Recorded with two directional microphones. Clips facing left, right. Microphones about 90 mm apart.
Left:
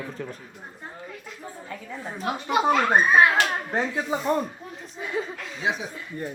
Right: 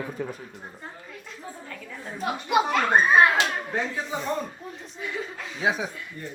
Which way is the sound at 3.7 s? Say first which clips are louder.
Left 3 dB; 35° left (ahead or behind).